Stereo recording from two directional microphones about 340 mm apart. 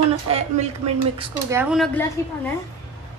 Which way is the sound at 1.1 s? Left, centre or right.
Centre.